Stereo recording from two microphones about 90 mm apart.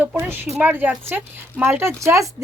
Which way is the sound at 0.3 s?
25° right (ahead or behind).